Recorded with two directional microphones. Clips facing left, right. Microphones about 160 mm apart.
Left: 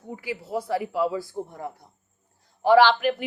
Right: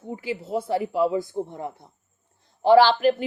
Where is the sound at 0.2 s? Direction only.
25° right (ahead or behind).